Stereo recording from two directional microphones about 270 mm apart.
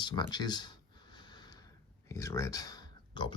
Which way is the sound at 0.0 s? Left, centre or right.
Centre.